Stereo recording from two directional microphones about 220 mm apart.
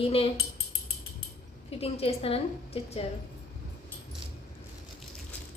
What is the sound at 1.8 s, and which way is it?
A woman's voice, 25° left (ahead or behind).